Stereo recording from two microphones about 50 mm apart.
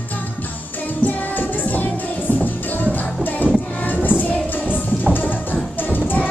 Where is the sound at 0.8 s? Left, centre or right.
Left.